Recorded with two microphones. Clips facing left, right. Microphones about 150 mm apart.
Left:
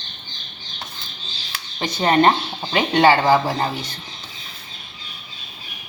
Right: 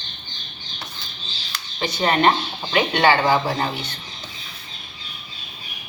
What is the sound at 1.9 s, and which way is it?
Speech, 30° left (ahead or behind).